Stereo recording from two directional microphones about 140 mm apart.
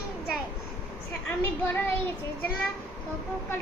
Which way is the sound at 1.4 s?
15° left (ahead or behind).